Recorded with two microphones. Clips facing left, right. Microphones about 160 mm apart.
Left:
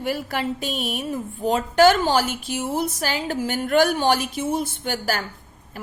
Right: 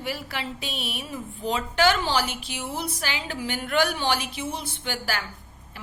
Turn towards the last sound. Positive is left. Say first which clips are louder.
# left 5 dB
turn(degrees=45)  # may be behind; listen again after turning